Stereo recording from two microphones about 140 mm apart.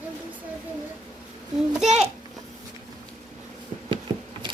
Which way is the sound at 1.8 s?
5° right (ahead or behind).